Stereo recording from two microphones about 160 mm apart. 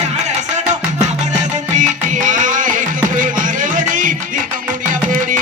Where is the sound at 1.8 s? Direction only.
55° right (ahead or behind).